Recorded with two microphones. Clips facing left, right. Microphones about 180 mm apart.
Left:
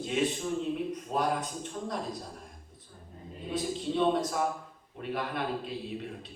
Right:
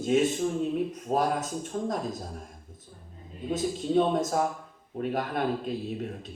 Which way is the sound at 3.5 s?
45° right (ahead or behind).